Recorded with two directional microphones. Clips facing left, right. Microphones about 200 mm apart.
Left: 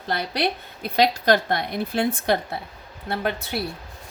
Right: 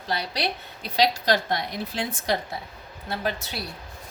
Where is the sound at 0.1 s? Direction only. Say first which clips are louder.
Left 4 dB; 55° left (ahead or behind).